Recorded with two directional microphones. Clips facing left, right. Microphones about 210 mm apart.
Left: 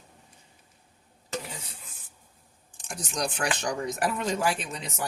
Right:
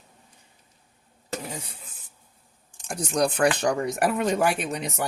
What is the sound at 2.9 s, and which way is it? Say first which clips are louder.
Speech: right 8 dB; 55° right (ahead or behind).